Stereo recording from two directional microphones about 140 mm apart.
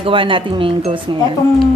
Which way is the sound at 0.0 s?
35° right (ahead or behind).